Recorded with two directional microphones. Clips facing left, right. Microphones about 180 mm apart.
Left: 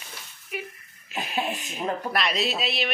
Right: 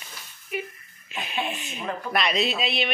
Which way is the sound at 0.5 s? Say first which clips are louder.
Right 3 dB; centre (ahead or behind).